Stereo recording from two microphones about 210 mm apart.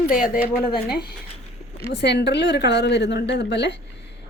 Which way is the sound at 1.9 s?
55° left (ahead or behind).